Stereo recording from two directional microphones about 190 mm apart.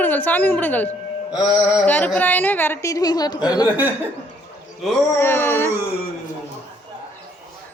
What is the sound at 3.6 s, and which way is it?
Speech, 10° right (ahead or behind).